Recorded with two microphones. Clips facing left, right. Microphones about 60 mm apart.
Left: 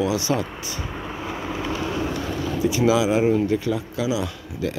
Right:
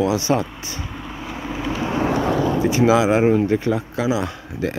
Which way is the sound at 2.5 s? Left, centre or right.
Right.